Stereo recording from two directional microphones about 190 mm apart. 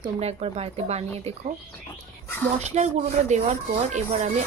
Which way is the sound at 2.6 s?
35° right (ahead or behind).